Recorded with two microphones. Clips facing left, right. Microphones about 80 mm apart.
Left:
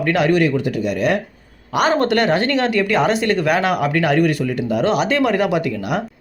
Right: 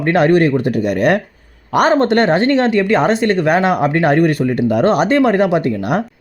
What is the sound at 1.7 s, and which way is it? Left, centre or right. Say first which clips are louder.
Speech: right 4 dB; right.